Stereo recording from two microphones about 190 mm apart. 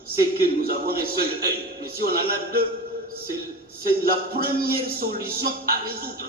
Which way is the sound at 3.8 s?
50° right (ahead or behind).